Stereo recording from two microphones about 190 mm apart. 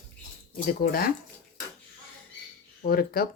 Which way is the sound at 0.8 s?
50° left (ahead or behind).